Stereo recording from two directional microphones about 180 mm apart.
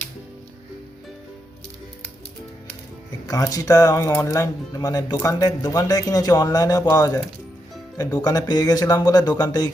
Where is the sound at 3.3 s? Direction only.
20° left (ahead or behind).